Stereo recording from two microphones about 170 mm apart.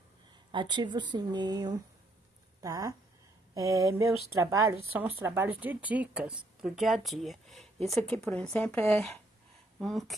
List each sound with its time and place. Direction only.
0.5 s a woman's voice: 25° right (ahead or behind); by 10.1 s centre (ahead or behind)